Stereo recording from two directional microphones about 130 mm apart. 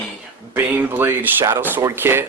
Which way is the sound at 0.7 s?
15° right (ahead or behind).